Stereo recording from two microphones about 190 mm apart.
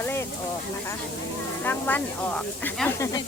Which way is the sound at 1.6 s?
10° left (ahead or behind).